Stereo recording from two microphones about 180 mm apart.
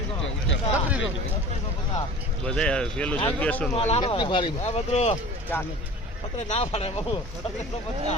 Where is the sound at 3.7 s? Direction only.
30° left (ahead or behind).